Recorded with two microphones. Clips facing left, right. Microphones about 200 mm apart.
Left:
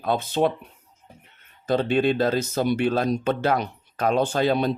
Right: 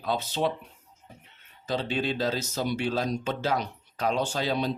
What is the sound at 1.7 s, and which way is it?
Speech, 55° left (ahead or behind).